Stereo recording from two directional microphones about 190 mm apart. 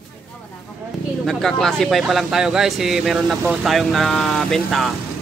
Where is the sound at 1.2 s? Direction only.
5° left (ahead or behind).